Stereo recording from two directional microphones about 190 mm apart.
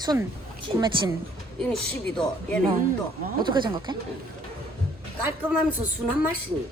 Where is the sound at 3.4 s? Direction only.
25° right (ahead or behind).